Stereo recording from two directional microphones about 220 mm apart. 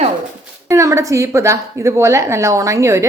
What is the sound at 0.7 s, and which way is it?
A woman's voice, 15° right (ahead or behind).